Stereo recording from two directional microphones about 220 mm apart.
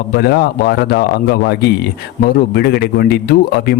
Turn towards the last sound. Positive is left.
turn(degrees=45)  # may be behind; listen again after turning